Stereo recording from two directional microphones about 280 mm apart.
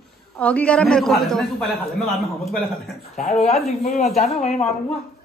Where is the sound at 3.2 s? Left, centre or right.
Left.